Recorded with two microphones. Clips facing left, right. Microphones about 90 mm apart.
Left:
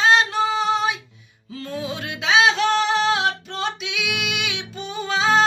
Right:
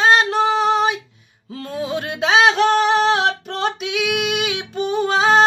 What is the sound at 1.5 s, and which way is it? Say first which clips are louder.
Music: right 4 dB; 45° right (ahead or behind).